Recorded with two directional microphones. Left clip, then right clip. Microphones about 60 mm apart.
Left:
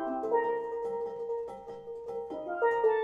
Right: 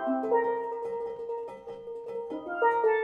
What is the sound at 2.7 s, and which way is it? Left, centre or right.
Music, centre.